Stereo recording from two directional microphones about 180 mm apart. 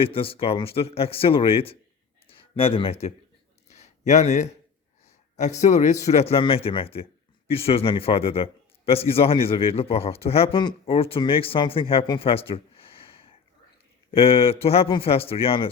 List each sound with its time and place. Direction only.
0.0 s speech: 30° left (ahead or behind)
3.7 s a sound: 40° left (ahead or behind)
5.4 s speech: 40° left (ahead or behind)